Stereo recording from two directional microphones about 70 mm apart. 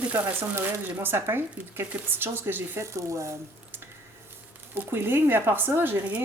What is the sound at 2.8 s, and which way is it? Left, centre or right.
Speech, right.